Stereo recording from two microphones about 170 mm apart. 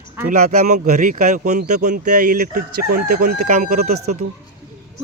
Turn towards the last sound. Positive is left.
turn(degrees=-45)  # may be behind; listen again after turning